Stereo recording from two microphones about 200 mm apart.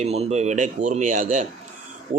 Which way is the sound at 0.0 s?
30° right (ahead or behind).